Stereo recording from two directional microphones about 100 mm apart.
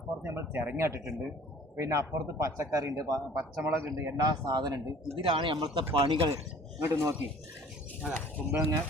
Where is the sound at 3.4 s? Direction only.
25° right (ahead or behind).